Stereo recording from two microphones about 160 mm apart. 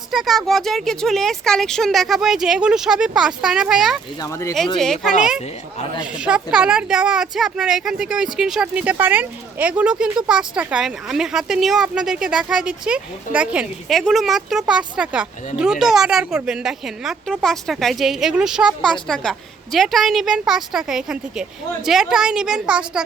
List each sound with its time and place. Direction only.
0.1 s speech: centre (ahead or behind)
4.2 s speech: 20° left (ahead or behind)
4.8 s speech: centre (ahead or behind)
6.1 s speech: 5° right (ahead or behind)